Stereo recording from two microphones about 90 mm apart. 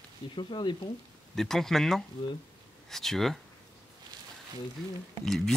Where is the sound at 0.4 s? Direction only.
60° left (ahead or behind).